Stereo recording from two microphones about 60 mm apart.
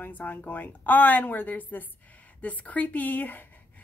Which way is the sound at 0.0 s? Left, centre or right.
Left.